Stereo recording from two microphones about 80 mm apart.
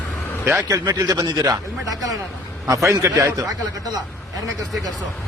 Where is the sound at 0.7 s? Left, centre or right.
Right.